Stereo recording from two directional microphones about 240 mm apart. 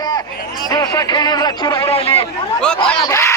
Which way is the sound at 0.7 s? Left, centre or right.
Centre.